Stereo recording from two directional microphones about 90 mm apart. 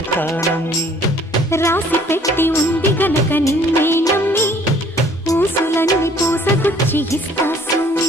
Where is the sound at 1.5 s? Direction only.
30° left (ahead or behind).